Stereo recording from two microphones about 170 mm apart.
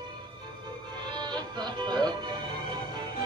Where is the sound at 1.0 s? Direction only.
25° right (ahead or behind).